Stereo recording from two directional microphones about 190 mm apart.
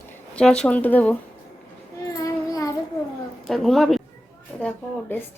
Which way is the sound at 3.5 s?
Centre (ahead or behind).